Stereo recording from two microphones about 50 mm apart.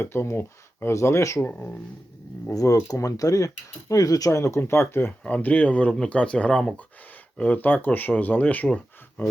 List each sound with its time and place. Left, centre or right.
0.0 s speech: left
0.9 s speech: left
1.4 s speech: left
2.6 s speech: left
4.6 s speech: left
5.2 s speech: left
7.3 s speech: left
8.6 s a sound: left